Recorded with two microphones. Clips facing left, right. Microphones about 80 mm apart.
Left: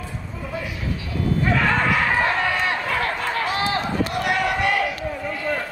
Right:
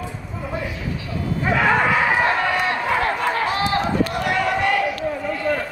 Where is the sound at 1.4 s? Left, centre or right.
Centre.